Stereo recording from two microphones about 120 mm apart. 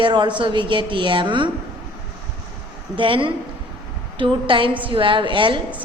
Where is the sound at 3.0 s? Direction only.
45° right (ahead or behind).